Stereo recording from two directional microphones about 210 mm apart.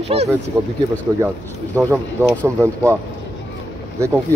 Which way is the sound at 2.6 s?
10° right (ahead or behind).